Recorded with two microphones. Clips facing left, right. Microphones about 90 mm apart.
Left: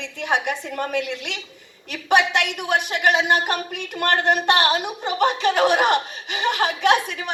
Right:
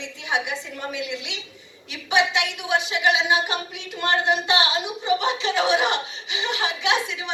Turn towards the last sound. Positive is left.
turn(degrees=55)  # may be behind; listen again after turning